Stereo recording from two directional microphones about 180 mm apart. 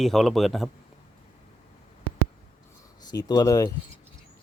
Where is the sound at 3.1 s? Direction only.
20° left (ahead or behind).